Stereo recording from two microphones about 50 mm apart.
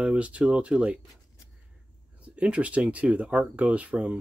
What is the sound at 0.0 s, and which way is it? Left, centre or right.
Speech, right.